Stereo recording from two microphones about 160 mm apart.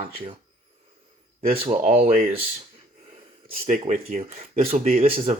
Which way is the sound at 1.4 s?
35° right (ahead or behind).